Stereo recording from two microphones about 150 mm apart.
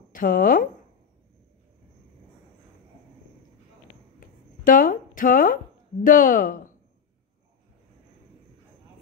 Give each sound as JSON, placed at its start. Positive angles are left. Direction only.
{"t": 0.1, "sound": "speech", "side_deg": 70}
{"t": 4.2, "sound": "a sound", "side_deg": 65}
{"t": 6.0, "sound": "speech", "side_deg": 65}